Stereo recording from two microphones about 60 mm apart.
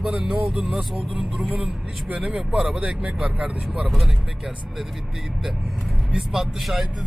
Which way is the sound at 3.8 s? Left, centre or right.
Centre.